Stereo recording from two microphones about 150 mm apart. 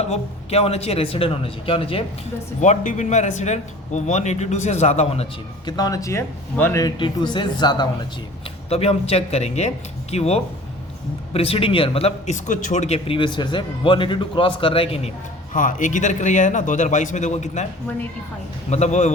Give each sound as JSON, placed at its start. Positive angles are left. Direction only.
{"t": 0.1, "sound": "speech", "side_deg": 45}
{"t": 2.6, "sound": "speech", "side_deg": 55}
{"t": 5.6, "sound": "speech", "side_deg": 25}
{"t": 8.7, "sound": "speech", "side_deg": 45}
{"t": 15.5, "sound": "speech", "side_deg": 60}
{"t": 18.7, "sound": "speech", "side_deg": 50}